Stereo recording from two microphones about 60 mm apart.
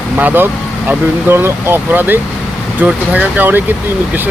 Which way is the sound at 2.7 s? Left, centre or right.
Right.